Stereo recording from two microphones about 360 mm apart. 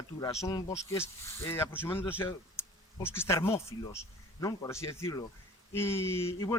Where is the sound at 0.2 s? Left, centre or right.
Centre.